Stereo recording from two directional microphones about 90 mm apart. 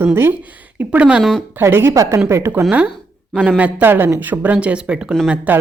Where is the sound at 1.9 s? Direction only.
40° right (ahead or behind).